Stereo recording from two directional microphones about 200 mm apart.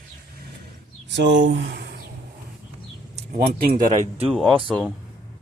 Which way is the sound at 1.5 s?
60° right (ahead or behind).